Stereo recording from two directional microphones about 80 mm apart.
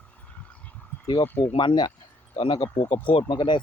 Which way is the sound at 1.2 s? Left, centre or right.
Left.